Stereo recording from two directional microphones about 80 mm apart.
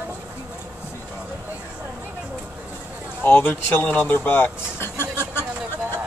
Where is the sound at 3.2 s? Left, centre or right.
Left.